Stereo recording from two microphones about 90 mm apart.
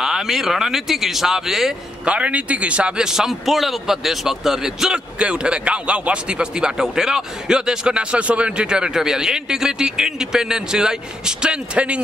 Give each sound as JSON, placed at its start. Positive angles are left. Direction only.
{"t": 0.0, "sound": "speech", "side_deg": -5}
{"t": 2.1, "sound": "a man's voice", "side_deg": -15}